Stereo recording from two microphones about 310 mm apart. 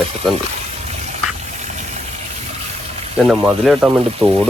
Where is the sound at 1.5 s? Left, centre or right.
Right.